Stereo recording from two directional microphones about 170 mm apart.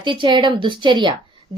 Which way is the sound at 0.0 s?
30° right (ahead or behind).